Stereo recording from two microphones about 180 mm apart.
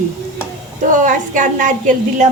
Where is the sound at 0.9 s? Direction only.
45° right (ahead or behind).